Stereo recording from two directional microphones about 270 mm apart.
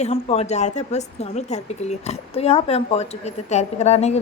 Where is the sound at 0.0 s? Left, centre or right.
Left.